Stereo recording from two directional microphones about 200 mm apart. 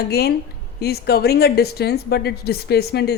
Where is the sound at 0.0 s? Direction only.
50° left (ahead or behind).